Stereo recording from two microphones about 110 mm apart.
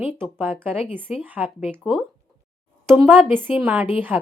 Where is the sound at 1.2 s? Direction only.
15° right (ahead or behind).